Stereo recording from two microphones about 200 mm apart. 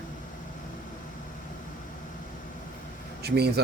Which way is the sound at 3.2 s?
55° right (ahead or behind).